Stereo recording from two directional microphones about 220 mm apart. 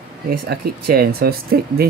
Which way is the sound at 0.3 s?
45° right (ahead or behind).